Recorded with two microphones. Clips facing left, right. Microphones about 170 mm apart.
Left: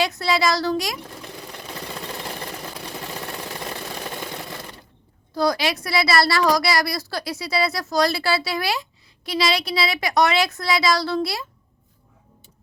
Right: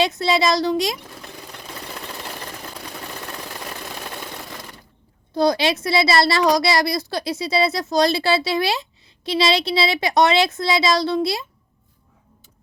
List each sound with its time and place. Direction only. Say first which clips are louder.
0.0 s a woman's voice: right 2 dB; 20° right (ahead or behind)
5.3 s a woman's voice: right 3 dB; 25° right (ahead or behind)